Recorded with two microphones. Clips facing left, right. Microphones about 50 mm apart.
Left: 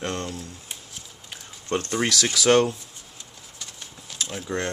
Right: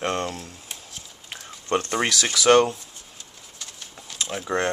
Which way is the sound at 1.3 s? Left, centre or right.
Right.